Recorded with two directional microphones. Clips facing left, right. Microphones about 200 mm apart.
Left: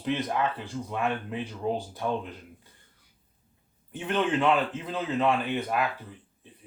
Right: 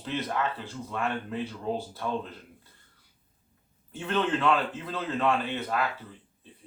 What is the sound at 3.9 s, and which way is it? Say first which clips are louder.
Speech: left 1 dB; 15° left (ahead or behind).